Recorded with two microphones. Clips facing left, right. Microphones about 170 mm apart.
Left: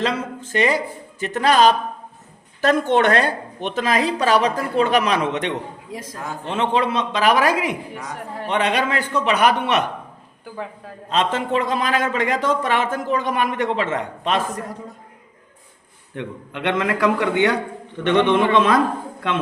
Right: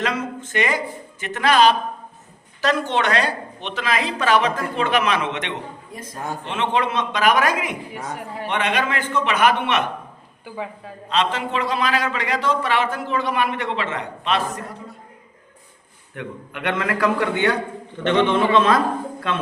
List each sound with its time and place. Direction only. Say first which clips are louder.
0.0 s speech: left 1 dB; 30° left (ahead or behind)
5.9 s a man's voice: left 4 dB; 90° left
6.4 s speech: left 2 dB; 35° left (ahead or behind)
10.4 s a woman's voice: right 1 dB; centre (ahead or behind)
11.1 s a man's voice: left 2 dB; 45° left (ahead or behind)
16.1 s a man's voice: left 2 dB; 25° left (ahead or behind)